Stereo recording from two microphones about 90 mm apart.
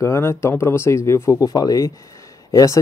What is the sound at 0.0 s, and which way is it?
Speech, 30° left (ahead or behind).